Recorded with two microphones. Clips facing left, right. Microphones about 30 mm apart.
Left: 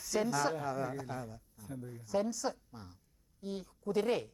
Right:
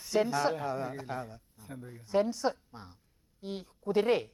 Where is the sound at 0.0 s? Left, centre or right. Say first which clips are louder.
Right 4 dB; right.